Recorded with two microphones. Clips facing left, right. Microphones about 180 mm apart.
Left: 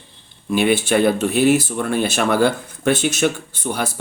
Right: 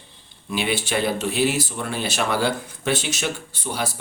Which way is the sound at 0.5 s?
50° left (ahead or behind).